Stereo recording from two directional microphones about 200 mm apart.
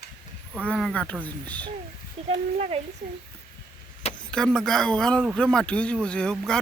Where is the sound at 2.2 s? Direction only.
30° right (ahead or behind).